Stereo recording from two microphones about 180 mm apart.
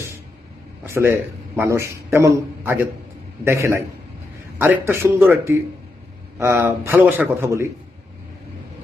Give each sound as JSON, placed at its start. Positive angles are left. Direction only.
{"t": 0.9, "sound": "a man's voice", "side_deg": -15}